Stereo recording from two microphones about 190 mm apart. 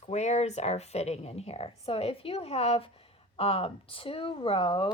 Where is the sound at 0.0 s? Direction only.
35° left (ahead or behind).